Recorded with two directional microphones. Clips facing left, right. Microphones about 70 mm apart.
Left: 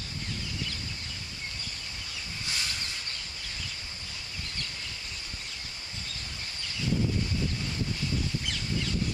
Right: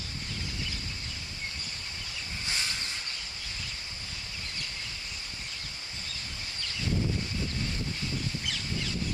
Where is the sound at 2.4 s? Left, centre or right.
Right.